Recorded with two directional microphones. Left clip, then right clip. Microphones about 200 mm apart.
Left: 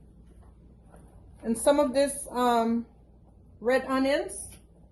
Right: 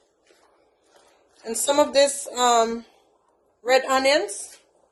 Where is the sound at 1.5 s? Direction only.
40° right (ahead or behind).